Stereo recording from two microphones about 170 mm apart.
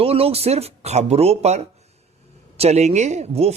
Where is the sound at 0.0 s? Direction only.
35° right (ahead or behind).